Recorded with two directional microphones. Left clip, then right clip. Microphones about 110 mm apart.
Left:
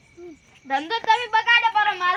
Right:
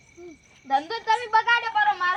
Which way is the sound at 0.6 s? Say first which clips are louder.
Left 2 dB; 30° right (ahead or behind).